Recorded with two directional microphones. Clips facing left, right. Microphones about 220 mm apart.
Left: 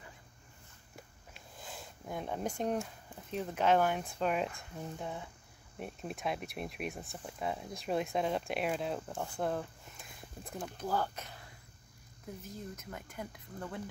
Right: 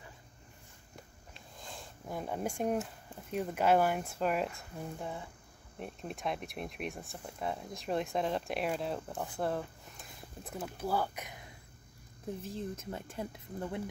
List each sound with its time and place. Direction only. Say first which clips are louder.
1.3 s speech: even; 5° left (ahead or behind); by 11.5 s 15° right (ahead or behind)
12.4 s speech: right 4 dB; 30° right (ahead or behind)